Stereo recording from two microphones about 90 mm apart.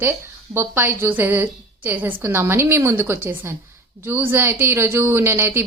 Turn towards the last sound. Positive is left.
turn(degrees=-25)  # may be behind; listen again after turning